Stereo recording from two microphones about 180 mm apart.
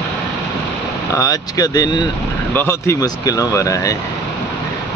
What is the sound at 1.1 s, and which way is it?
Speech, 20° left (ahead or behind).